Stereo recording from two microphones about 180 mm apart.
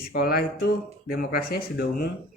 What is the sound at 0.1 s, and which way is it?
Speech, 60° left (ahead or behind).